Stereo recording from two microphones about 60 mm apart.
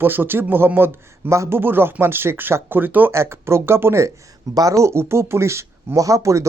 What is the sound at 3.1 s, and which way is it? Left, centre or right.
Speech, right.